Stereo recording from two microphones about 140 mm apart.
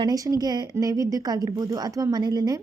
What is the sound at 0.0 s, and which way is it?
A woman's voice, 25° right (ahead or behind).